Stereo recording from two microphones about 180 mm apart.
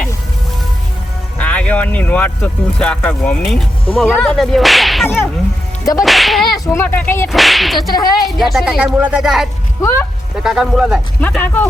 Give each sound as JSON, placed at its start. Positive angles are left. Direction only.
{"t": 1.4, "sound": "speech", "side_deg": 10}
{"t": 5.0, "sound": "speech", "side_deg": 10}
{"t": 6.0, "sound": "speech", "side_deg": 0}
{"t": 6.7, "sound": "speech", "side_deg": 10}
{"t": 7.3, "sound": "speech", "side_deg": 0}
{"t": 7.9, "sound": "a woman's voice", "side_deg": 20}
{"t": 8.4, "sound": "speech", "side_deg": 0}
{"t": 11.2, "sound": "speech", "side_deg": 10}